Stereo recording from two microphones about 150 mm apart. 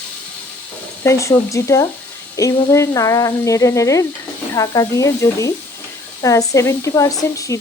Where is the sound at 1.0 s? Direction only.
20° left (ahead or behind).